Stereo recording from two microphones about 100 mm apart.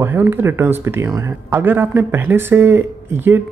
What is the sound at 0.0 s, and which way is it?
A man's voice, 20° right (ahead or behind).